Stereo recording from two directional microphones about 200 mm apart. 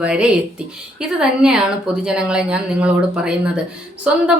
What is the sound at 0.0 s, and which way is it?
A woman's voice, 5° right (ahead or behind).